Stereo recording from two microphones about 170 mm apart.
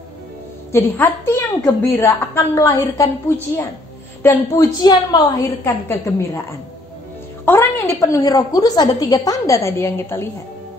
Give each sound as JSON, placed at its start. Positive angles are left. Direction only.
{"t": 0.7, "sound": "a woman's voice", "side_deg": 10}
{"t": 7.4, "sound": "a woman's voice", "side_deg": 15}